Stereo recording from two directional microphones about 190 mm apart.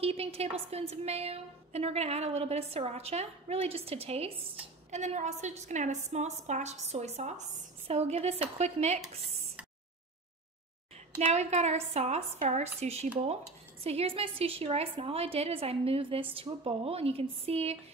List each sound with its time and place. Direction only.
0.0 s a woman's voice: 30° right (ahead or behind)
11.1 s a woman's voice: 35° right (ahead or behind)